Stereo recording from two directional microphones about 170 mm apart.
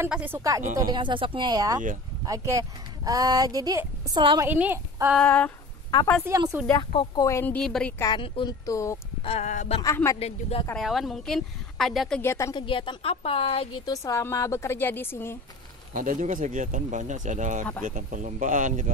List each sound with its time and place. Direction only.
0.0 s speech: 10° right (ahead or behind); by 4.5 s 25° right (ahead or behind)
4.5 s speech: 10° right (ahead or behind)
5.1 s a woman's voice: 5° left (ahead or behind)
6.2 s speech: 15° right (ahead or behind)
6.8 s speech: 30° left (ahead or behind)
7.2 s a woman's voice: 10° left (ahead or behind)
8.0 s speech: 25° left (ahead or behind)
9.2 s a woman's voice: 40° left (ahead or behind)
10.7 s a woman's voice: centre (ahead or behind)
12.2 s a woman's voice: 15° left (ahead or behind)
12.5 s a woman's voice: 30° left (ahead or behind)
14.0 s a woman's voice: 15° left (ahead or behind)
15.9 s speech: 50° right (ahead or behind)